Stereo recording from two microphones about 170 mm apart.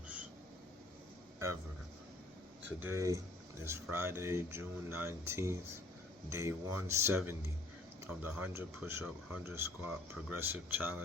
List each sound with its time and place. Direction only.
2.8 s speech: 15° right (ahead or behind)